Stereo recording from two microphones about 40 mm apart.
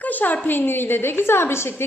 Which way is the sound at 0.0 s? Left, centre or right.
Left.